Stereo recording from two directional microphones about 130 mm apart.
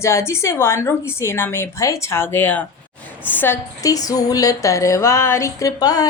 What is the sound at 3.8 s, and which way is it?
Speech, 30° left (ahead or behind).